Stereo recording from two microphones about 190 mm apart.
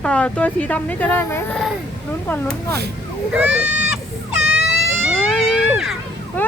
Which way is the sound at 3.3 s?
5° right (ahead or behind).